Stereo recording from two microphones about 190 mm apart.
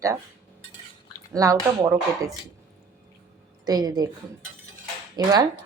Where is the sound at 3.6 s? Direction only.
20° right (ahead or behind).